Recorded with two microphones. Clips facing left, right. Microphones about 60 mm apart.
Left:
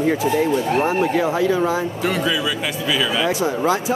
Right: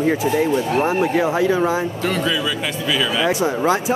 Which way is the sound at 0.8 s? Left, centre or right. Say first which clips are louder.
Right 2 dB; centre.